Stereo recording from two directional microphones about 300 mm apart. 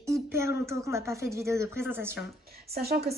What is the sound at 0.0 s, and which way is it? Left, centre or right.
A woman's voice, centre.